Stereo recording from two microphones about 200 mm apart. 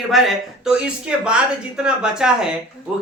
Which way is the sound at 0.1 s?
Centre (ahead or behind).